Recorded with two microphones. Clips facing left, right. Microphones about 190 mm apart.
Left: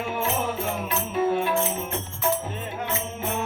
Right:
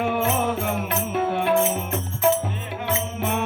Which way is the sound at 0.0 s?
60° right (ahead or behind).